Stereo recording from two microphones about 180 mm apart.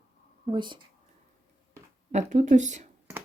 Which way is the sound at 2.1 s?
40° right (ahead or behind).